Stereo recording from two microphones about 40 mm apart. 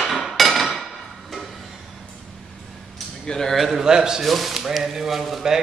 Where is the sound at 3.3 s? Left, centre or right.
Centre.